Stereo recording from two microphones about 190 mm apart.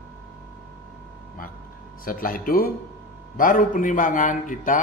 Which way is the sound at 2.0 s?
50° left (ahead or behind).